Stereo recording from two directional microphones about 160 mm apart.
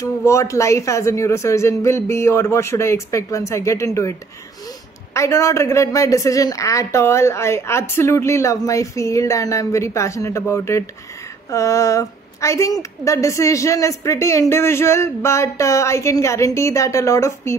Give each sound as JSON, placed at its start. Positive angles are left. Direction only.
{"t": 0.0, "sound": "a woman's voice", "side_deg": 20}
{"t": 5.1, "sound": "a woman's voice", "side_deg": 20}